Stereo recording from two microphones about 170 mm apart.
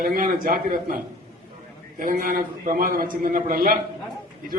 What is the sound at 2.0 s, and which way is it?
A man's voice, 55° right (ahead or behind).